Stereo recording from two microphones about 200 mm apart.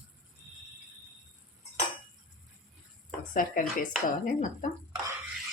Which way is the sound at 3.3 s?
40° left (ahead or behind).